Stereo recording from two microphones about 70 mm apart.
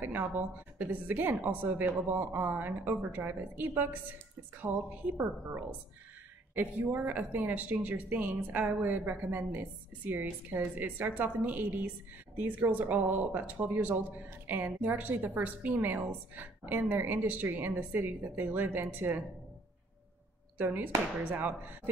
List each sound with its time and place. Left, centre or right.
0.0 s speech: right
14.5 s speech: right
20.5 s speech: right